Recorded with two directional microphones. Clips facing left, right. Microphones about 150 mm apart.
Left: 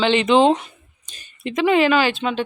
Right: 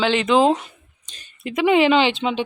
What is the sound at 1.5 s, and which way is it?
Speech, 15° right (ahead or behind).